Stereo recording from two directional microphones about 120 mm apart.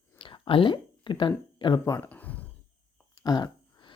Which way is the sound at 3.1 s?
35° left (ahead or behind).